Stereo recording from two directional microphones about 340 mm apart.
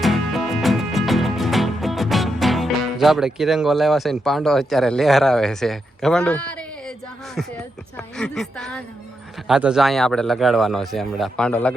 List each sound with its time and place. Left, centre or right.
0.0 s music: centre
7.3 s a man's voice: centre